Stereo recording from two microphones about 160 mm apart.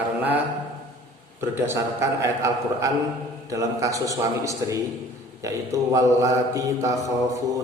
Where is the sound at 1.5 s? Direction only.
15° right (ahead or behind).